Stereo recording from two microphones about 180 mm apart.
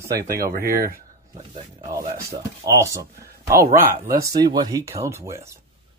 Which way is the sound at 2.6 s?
15° right (ahead or behind).